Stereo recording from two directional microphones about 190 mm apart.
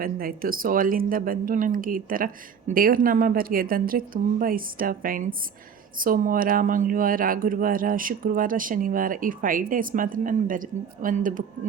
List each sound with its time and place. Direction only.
0.0 s speech: 50° right (ahead or behind)